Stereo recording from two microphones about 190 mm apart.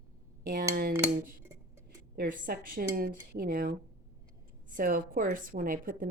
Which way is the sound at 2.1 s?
50° right (ahead or behind).